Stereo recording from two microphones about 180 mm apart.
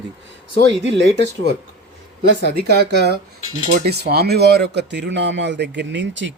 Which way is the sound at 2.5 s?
65° right (ahead or behind).